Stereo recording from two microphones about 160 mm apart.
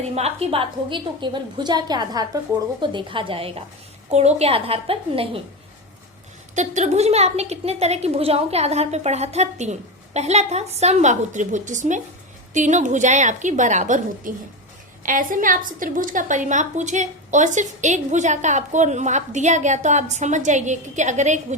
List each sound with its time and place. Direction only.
0.0 s a woman's voice: 40° right (ahead or behind)
6.6 s a woman's voice: 45° right (ahead or behind)